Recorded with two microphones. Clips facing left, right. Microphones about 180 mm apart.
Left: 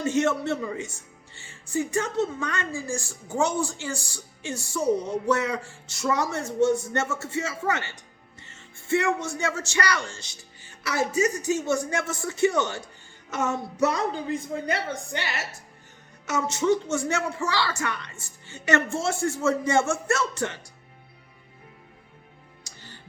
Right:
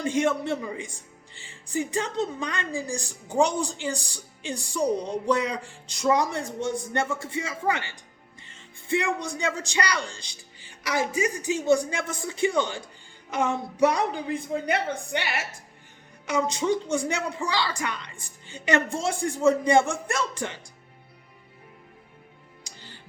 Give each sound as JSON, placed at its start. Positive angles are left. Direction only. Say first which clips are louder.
{"t": 0.0, "sound": "speech", "louder": "left 1 dB", "side_deg": -15}
{"t": 22.6, "sound": "music", "louder": "right 1 dB", "side_deg": -15}